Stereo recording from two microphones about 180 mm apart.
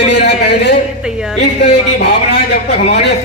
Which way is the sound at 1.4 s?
70° left (ahead or behind).